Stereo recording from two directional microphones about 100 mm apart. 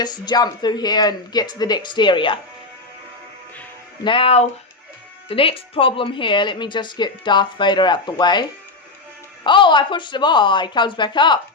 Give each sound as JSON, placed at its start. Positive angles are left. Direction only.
{"t": 0.0, "sound": "a woman's voice", "side_deg": 40}
{"t": 4.0, "sound": "speech", "side_deg": 65}
{"t": 5.3, "sound": "a woman's voice", "side_deg": 65}